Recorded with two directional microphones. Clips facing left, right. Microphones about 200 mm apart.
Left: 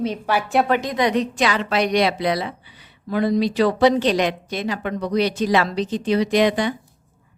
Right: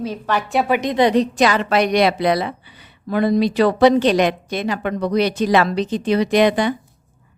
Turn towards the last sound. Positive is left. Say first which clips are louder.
# right 3 dB
turn(degrees=-55)  # may be behind; listen again after turning